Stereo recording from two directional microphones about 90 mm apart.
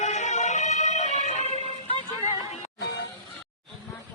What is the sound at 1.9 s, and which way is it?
Music, 80° left.